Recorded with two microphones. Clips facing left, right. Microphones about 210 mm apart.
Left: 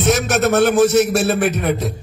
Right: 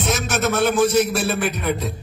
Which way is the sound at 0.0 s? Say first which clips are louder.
Left 6 dB; 70° left (ahead or behind).